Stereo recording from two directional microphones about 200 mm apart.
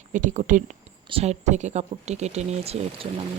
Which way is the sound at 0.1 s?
40° right (ahead or behind).